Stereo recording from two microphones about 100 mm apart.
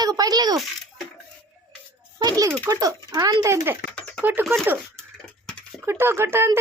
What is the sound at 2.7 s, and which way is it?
Speech, 35° right (ahead or behind).